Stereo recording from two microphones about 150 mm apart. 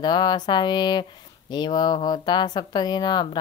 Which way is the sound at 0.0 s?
30° left (ahead or behind).